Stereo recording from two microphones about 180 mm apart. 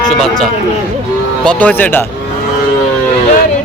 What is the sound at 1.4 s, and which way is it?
Speech, 5° left (ahead or behind).